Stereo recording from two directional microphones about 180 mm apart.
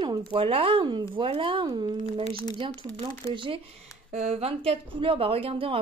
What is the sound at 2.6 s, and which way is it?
A woman's voice, 25° right (ahead or behind).